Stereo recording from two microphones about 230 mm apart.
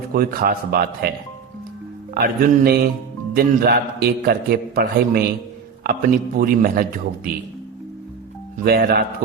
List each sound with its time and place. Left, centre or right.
0.1 s a man's voice: right
2.1 s a man's voice: right
8.6 s a man's voice: right